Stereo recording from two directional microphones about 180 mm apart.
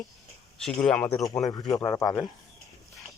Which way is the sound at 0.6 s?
5° left (ahead or behind).